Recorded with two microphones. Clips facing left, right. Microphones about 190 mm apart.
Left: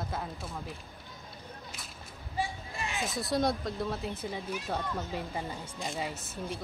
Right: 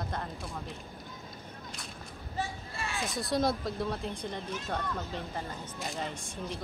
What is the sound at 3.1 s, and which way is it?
Speech, centre (ahead or behind).